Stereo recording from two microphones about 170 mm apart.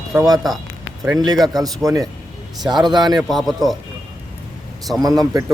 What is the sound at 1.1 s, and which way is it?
Speech, 25° right (ahead or behind).